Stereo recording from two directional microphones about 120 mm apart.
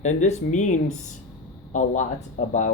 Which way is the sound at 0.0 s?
80° left.